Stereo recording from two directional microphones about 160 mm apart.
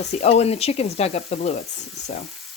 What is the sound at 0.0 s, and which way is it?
Speech, 45° left (ahead or behind).